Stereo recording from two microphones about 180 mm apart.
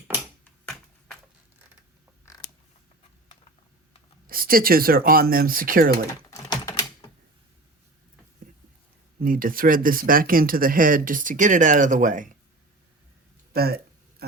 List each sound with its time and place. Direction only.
0.6 s computer keyboard: 5° left (ahead or behind)
4.3 s speech: 55° right (ahead or behind)
6.3 s typing: 20° left (ahead or behind)
9.2 s speech: 50° right (ahead or behind)
13.5 s a sound: 60° right (ahead or behind)